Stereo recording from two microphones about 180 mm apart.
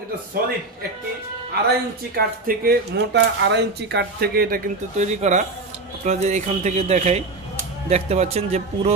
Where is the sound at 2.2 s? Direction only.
60° right (ahead or behind).